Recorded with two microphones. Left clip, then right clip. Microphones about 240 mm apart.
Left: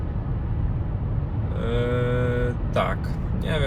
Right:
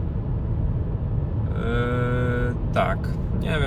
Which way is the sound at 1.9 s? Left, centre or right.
Right.